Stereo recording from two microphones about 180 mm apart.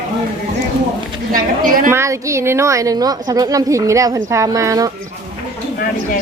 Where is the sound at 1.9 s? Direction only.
15° right (ahead or behind).